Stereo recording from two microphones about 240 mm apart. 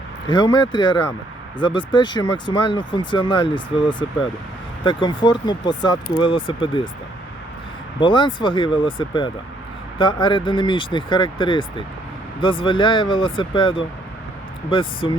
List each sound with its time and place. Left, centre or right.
0.3 s speech: centre
7.9 s speech: centre